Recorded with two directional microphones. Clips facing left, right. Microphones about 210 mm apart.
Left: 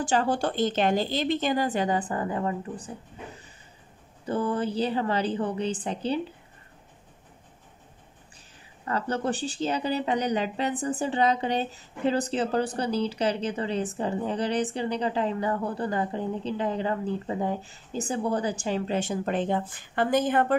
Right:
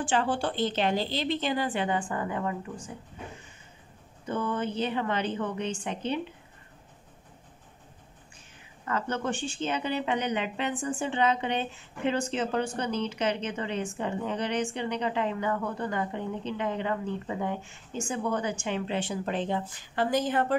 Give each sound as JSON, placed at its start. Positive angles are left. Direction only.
{"t": 0.0, "sound": "speech", "side_deg": 40}
{"t": 4.3, "sound": "speech", "side_deg": 35}
{"t": 8.8, "sound": "speech", "side_deg": 35}